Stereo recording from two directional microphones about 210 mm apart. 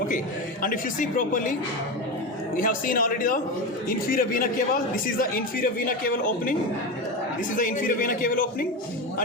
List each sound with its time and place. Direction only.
0.6 s a man's voice: 40° left (ahead or behind)
2.6 s a man's voice: 40° left (ahead or behind)
7.5 s a man's voice: 40° left (ahead or behind)